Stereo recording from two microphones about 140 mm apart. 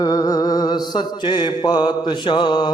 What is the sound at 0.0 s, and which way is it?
Mantra, 25° left (ahead or behind).